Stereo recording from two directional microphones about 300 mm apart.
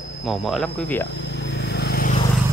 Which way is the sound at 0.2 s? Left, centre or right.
Centre.